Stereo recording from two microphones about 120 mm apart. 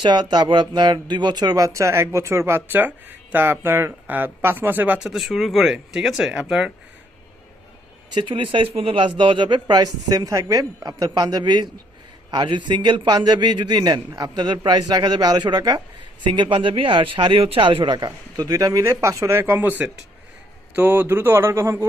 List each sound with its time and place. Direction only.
0.0 s speech: 40° right (ahead or behind); by 6.7 s 5° right (ahead or behind)
8.1 s speech: 45° right (ahead or behind); by 21.8 s 20° right (ahead or behind)